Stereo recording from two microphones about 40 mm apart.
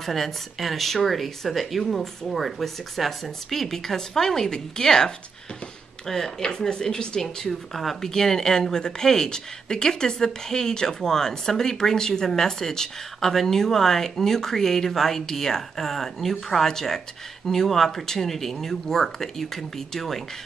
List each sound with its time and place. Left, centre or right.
0.0 s speech: centre
7.4 s speech: centre